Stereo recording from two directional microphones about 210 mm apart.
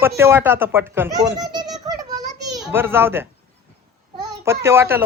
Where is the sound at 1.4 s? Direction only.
20° right (ahead or behind).